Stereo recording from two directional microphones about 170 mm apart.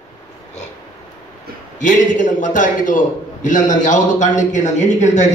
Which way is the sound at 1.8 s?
45° left (ahead or behind).